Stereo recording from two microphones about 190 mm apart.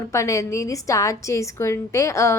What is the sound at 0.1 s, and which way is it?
A woman's voice, 15° left (ahead or behind).